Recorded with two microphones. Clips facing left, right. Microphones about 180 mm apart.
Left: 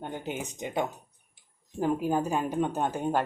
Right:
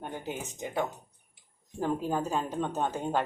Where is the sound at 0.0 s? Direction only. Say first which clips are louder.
Left 2 dB; 20° left (ahead or behind).